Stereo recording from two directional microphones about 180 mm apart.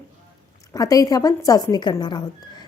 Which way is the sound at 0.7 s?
20° left (ahead or behind).